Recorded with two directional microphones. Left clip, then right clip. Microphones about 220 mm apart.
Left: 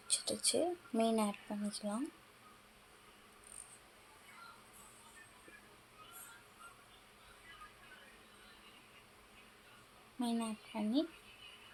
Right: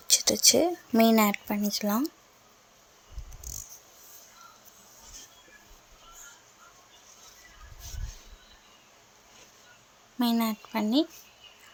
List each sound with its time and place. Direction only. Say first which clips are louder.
0.1 s speech: right 15 dB; 35° right (ahead or behind)
10.2 s speech: right 12 dB; 35° right (ahead or behind)